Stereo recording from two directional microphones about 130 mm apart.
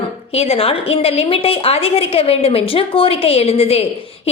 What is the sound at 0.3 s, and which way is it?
A woman's voice, 50° left (ahead or behind).